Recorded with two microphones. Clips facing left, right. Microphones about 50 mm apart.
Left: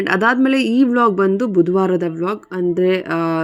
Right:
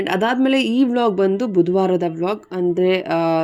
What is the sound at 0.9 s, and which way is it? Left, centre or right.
Speech, left.